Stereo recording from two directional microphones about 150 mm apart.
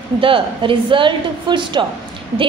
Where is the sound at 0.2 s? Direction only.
35° right (ahead or behind).